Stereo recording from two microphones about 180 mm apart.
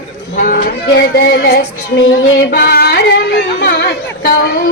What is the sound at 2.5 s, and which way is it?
Music, 60° left (ahead or behind).